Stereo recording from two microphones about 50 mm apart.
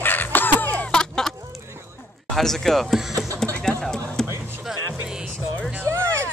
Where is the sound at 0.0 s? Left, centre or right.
Left.